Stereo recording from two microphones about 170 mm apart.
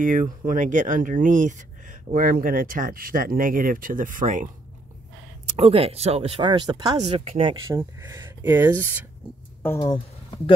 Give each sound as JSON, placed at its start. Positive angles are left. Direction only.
{"t": 0.0, "sound": "speech", "side_deg": -50}
{"t": 5.5, "sound": "speech", "side_deg": -35}
{"t": 7.0, "sound": "speech", "side_deg": -40}
{"t": 7.5, "sound": "speech", "side_deg": -15}
{"t": 9.6, "sound": "a sound", "side_deg": 15}